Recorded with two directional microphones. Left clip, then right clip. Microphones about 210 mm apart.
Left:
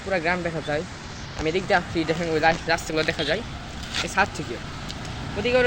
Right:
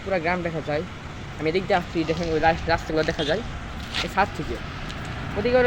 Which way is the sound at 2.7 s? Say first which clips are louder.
Even; 20° right (ahead or behind).